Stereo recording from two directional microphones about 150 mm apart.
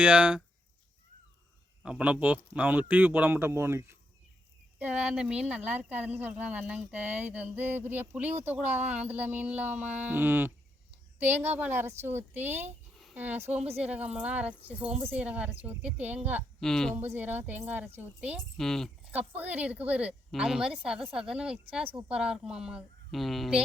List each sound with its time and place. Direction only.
0.0 s speech: 10° right (ahead or behind)
1.8 s speech: 5° right (ahead or behind)
16.6 s a woman's voice: 5° left (ahead or behind)
16.9 s speech: 15° right (ahead or behind)
18.3 s a woman's voice: centre (ahead or behind)
19.4 s a woman's voice: 10° right (ahead or behind)